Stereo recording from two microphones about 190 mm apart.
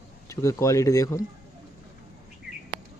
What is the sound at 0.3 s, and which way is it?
Speech, 15° left (ahead or behind).